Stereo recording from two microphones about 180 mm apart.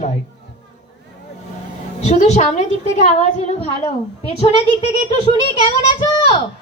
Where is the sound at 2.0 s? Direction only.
40° left (ahead or behind).